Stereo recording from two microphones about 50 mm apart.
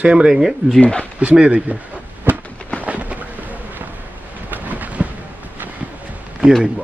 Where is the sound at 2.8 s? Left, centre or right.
Right.